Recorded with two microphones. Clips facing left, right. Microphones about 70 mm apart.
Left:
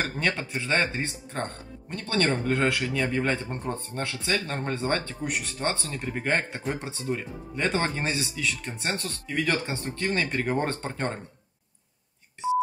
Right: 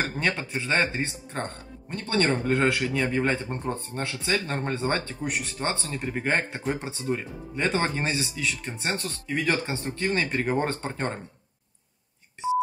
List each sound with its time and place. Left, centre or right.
0.0 s speech: centre
0.4 s speech: right
3.7 s speech: right